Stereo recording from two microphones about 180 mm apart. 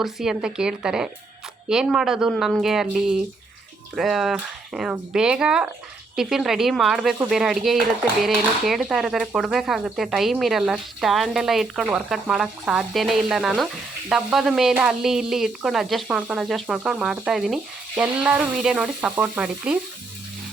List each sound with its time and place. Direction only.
0.0 s speech: centre (ahead or behind)